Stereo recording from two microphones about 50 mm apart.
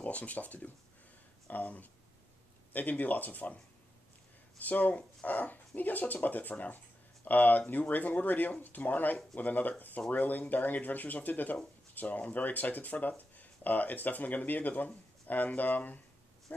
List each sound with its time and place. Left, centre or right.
0.0 s speech: left
4.6 s speech: left